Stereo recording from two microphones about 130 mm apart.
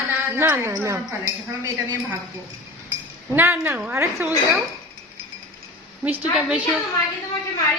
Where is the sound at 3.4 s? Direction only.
15° right (ahead or behind).